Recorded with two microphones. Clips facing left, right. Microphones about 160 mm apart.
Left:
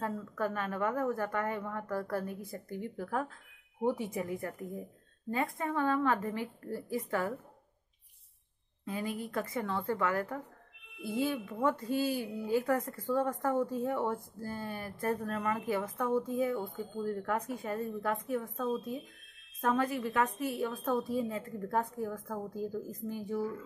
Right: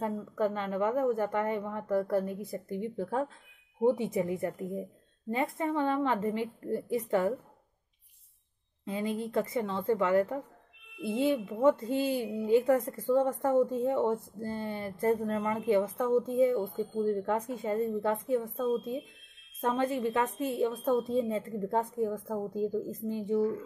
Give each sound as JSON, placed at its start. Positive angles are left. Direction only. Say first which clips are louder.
{"t": 0.0, "sound": "speech", "louder": "right 4 dB", "side_deg": -20}
{"t": 8.8, "sound": "speech", "louder": "right 4 dB", "side_deg": -25}